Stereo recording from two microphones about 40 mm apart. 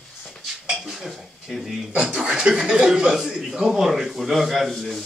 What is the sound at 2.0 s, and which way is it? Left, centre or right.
A man's voice, centre.